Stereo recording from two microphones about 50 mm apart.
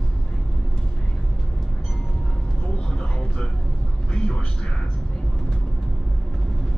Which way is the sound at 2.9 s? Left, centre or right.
Left.